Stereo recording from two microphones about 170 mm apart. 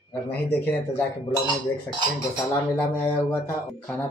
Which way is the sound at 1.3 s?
25° left (ahead or behind).